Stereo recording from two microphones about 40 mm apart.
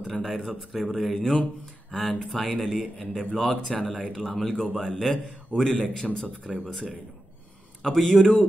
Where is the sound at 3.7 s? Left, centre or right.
Centre.